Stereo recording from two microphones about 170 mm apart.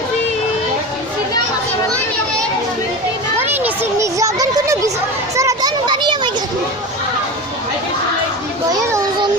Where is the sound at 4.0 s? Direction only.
20° right (ahead or behind).